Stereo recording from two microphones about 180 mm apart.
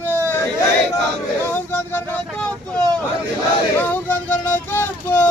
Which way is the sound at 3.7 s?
10° left (ahead or behind).